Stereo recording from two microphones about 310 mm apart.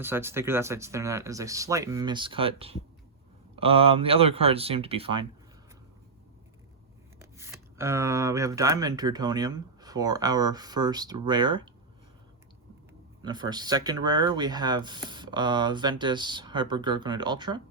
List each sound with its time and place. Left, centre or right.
0.0 s speech: centre
7.2 s speech: centre
13.2 s speech: centre